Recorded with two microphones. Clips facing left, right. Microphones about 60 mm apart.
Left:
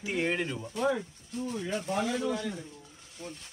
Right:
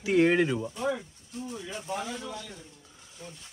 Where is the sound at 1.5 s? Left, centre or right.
Left.